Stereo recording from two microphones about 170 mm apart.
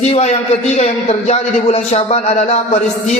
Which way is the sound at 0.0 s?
40° left (ahead or behind).